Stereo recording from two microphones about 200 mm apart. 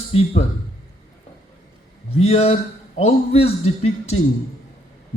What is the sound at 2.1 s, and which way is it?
A man's voice, 30° left (ahead or behind).